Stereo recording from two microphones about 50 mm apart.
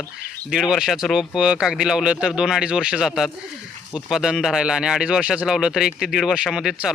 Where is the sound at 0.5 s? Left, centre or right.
Centre.